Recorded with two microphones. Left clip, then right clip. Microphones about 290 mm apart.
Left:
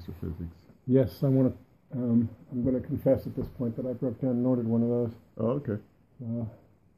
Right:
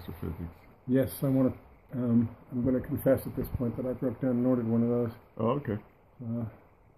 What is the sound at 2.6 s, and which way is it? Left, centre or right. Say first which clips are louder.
Speech: left 1 dB; centre.